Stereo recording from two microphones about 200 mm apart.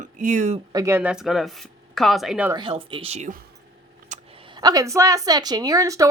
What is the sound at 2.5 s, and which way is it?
Speech, 25° right (ahead or behind).